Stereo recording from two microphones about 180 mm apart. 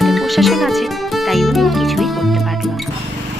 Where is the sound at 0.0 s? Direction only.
Centre (ahead or behind).